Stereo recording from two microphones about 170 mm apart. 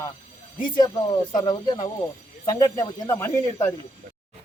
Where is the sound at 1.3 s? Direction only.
25° left (ahead or behind).